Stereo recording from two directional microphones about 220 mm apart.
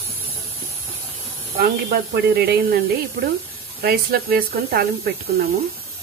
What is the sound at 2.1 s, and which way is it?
Speech, 45° right (ahead or behind).